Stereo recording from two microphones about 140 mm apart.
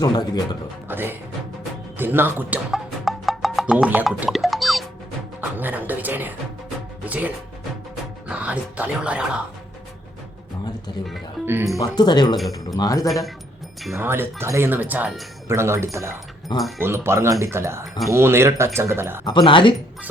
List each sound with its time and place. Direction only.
0.0 s speech: 25° left (ahead or behind)
0.9 s speech: 15° right (ahead or behind)
2.7 s music: centre (ahead or behind)
5.4 s speech: 10° right (ahead or behind)
11.4 s speech: 15° right (ahead or behind)
11.8 s speech: 30° left (ahead or behind)
13.1 s speech: centre (ahead or behind)
13.9 s speech: 15° right (ahead or behind)
16.6 s speech: centre (ahead or behind)
16.8 s speech: 15° right (ahead or behind)
19.2 s speech: 30° left (ahead or behind)